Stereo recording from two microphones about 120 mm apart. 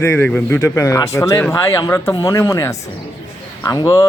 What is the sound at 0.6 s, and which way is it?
A man's voice, 25° left (ahead or behind).